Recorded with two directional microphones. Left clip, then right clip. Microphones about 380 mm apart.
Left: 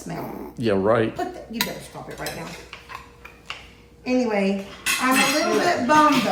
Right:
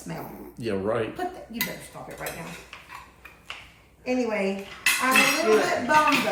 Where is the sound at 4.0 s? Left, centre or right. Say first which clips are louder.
Left 4 dB; centre.